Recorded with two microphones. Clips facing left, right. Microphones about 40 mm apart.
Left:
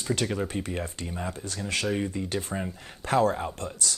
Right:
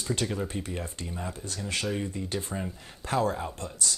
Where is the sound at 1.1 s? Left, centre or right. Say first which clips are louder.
Left 2 dB; left.